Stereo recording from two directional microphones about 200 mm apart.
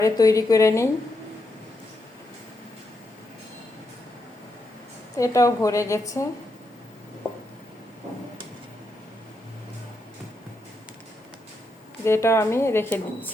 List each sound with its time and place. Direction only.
0.0 s speech: 15° left (ahead or behind)
5.1 s speech: 15° left (ahead or behind)
12.0 s speech: 15° left (ahead or behind)